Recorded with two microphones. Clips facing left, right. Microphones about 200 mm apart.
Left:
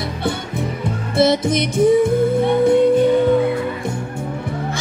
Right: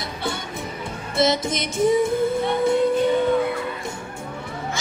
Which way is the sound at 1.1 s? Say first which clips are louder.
Left 5 dB; 60° left (ahead or behind).